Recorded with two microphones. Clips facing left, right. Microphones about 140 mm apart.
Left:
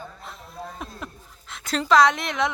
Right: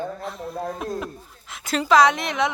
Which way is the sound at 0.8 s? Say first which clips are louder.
Right 8 dB; 5° right (ahead or behind).